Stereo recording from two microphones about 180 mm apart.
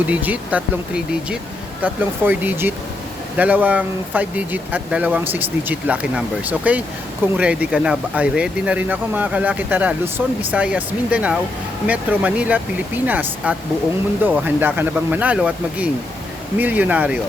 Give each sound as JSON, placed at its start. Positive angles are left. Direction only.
{"t": 0.1, "sound": "speech", "side_deg": -10}